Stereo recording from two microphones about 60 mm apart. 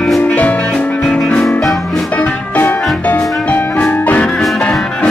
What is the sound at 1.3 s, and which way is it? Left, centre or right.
Music, centre.